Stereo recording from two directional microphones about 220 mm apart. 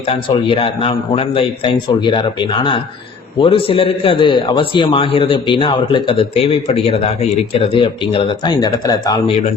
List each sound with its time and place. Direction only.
0.0 s a man's voice: 25° left (ahead or behind)